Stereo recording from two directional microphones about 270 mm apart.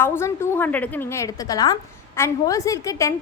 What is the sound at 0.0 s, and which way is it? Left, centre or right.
A woman's voice, centre.